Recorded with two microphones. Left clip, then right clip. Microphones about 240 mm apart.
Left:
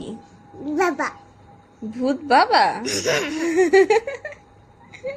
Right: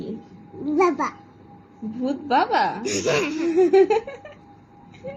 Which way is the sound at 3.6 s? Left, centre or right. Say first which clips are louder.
Left 1 dB; left.